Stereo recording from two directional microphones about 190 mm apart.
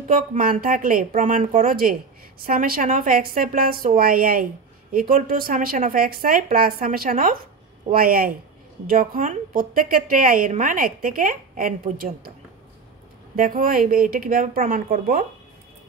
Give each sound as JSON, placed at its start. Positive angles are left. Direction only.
{"t": 0.1, "sound": "a woman's voice", "side_deg": -45}
{"t": 13.4, "sound": "a woman's voice", "side_deg": -50}